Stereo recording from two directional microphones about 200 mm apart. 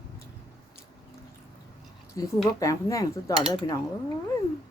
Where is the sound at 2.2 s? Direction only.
15° left (ahead or behind).